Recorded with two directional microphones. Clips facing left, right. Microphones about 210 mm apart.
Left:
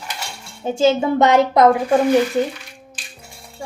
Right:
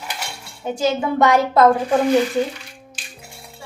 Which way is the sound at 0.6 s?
25° left (ahead or behind).